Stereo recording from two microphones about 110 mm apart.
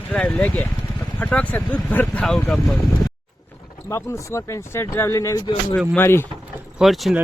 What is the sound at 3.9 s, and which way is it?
Speech, 25° left (ahead or behind).